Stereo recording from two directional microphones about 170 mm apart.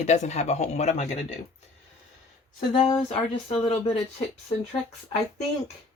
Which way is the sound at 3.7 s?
35° left (ahead or behind).